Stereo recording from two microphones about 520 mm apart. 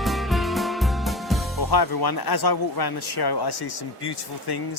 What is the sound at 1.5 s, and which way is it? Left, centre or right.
Speech, left.